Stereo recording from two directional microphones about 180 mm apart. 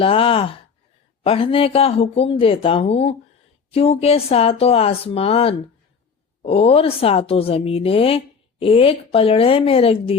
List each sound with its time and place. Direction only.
0.0 s a woman's voice: 30° left (ahead or behind)